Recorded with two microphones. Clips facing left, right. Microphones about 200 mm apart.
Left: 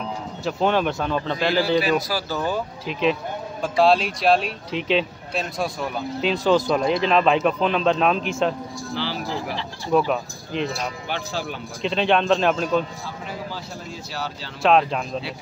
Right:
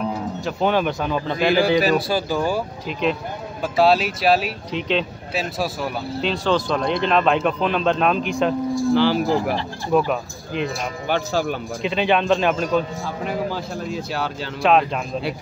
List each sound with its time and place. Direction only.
0.5 s speech: centre (ahead or behind)
1.8 s speech: 40° right (ahead or behind)
2.0 s speech: 20° right (ahead or behind); by 6.3 s 5° right (ahead or behind)
6.4 s speech: 10° left (ahead or behind)
8.9 s speech: 50° right (ahead or behind)
9.9 s speech: 5° right (ahead or behind)
11.1 s speech: 45° right (ahead or behind)
11.8 s speech: 5° right (ahead or behind)
13.2 s a sound: 55° right (ahead or behind)
14.1 s speech: 55° right (ahead or behind)
14.6 s speech: centre (ahead or behind)